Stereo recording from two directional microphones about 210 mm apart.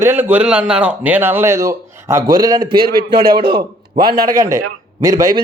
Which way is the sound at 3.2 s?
45° right (ahead or behind).